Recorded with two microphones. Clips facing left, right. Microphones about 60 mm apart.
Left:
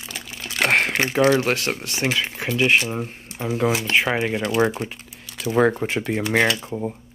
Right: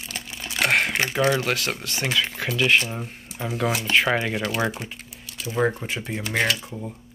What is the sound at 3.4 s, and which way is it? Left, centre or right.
Speech, centre.